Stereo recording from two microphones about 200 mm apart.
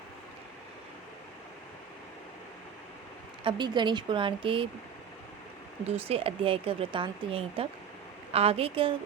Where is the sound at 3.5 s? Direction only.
25° right (ahead or behind).